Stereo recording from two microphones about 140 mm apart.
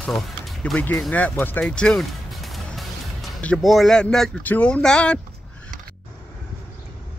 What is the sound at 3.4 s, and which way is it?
Speech, 5° left (ahead or behind).